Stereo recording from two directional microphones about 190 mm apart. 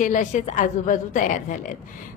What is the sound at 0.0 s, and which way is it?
A woman's voice, 40° left (ahead or behind).